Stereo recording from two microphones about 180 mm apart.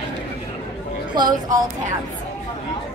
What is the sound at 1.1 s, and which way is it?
Speech, 25° right (ahead or behind).